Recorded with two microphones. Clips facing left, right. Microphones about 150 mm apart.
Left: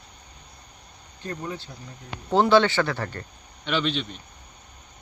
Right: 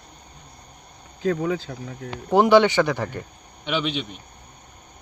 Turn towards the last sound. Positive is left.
turn(degrees=-15)  # may be behind; listen again after turning